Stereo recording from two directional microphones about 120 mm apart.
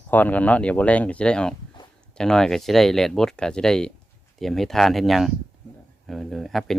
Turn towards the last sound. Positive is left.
turn(degrees=0)  # may be behind; listen again after turning